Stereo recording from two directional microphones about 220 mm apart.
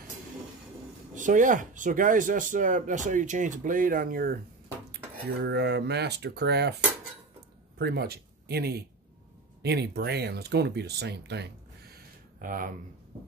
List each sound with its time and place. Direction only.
1.1 s speech: 35° right (ahead or behind)
7.8 s speech: 45° right (ahead or behind)
11.9 s a sound: 40° right (ahead or behind)